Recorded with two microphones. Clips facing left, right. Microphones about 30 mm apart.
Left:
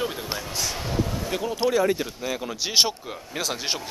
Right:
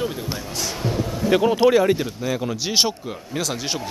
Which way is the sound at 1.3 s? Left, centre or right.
Right.